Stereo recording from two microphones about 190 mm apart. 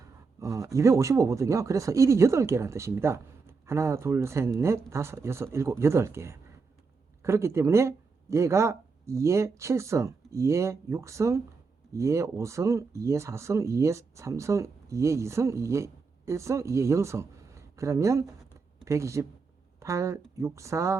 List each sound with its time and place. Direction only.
0.0 s speech: 15° right (ahead or behind)